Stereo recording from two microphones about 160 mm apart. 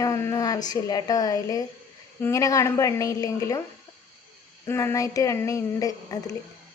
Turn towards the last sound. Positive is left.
turn(degrees=20)  # may be behind; listen again after turning